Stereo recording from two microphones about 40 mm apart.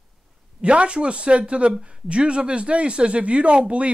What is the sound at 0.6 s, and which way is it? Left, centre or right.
Speech, right.